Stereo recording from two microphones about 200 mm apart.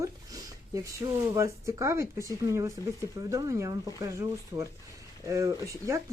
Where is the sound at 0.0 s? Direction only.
15° right (ahead or behind).